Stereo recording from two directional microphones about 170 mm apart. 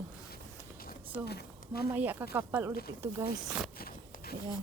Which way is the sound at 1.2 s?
70° left (ahead or behind).